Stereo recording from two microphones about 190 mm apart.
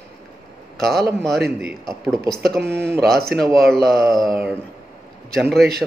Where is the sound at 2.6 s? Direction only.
60° right (ahead or behind).